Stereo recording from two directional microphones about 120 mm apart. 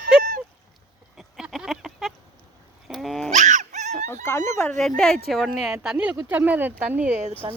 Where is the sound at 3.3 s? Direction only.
80° right.